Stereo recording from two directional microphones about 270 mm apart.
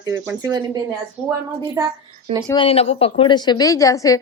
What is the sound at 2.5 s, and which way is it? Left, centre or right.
A woman's voice, centre.